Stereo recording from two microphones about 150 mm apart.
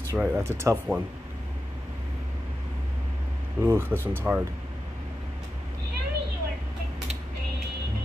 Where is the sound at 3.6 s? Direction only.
15° right (ahead or behind).